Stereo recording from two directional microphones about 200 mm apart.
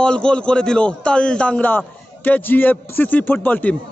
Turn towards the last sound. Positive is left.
turn(degrees=10)  # may be behind; listen again after turning